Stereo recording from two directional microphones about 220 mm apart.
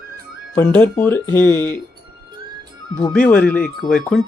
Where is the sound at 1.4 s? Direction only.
15° right (ahead or behind).